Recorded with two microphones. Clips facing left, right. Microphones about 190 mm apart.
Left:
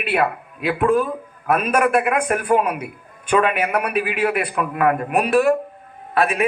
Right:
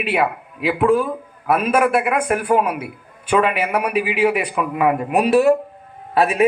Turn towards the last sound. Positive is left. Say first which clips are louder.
# right 2 dB
turn(degrees=-25)  # may be behind; listen again after turning